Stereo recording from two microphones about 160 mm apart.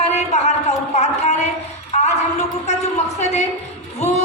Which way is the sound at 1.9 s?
45° left (ahead or behind).